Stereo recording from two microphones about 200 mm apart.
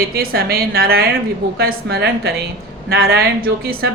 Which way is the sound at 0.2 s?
50° right (ahead or behind).